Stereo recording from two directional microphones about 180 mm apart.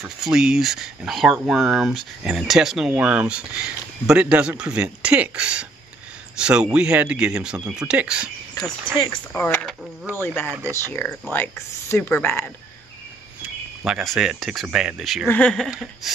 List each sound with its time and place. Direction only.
0.0 s speech: 5° right (ahead or behind)
8.9 s speech: 30° left (ahead or behind)
9.3 s speech: 10° left (ahead or behind)
13.4 s speech: 5° right (ahead or behind)